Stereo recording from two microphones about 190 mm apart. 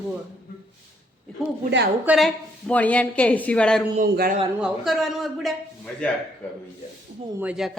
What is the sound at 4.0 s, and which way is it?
Speech, 45° right (ahead or behind).